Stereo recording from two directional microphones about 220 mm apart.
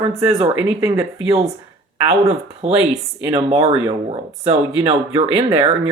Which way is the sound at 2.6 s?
30° right (ahead or behind).